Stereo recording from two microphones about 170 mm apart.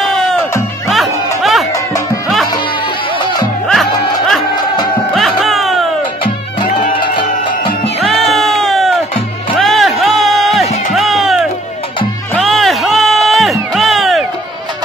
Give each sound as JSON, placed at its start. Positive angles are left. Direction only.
{"t": 0.0, "sound": "music", "side_deg": 0}
{"t": 3.6, "sound": "music", "side_deg": 0}
{"t": 4.6, "sound": "music", "side_deg": 25}
{"t": 5.1, "sound": "music", "side_deg": 0}
{"t": 6.9, "sound": "music", "side_deg": 30}
{"t": 8.0, "sound": "music", "side_deg": 0}